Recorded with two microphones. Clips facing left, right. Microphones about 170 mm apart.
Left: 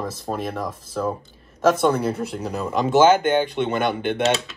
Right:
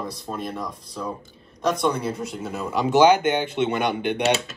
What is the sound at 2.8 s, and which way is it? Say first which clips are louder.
Speech: left 1 dB; 15° right (ahead or behind).